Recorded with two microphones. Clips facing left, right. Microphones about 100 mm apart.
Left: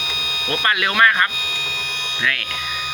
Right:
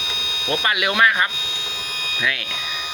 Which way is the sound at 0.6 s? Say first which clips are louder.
Left 2 dB; 15° right (ahead or behind).